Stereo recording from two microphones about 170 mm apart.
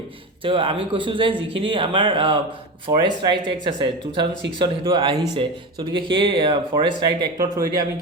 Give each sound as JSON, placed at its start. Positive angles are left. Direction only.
{"t": 0.4, "sound": "speech", "side_deg": -30}